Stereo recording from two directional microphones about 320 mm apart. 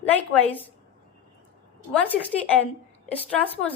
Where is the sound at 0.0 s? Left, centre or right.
Centre.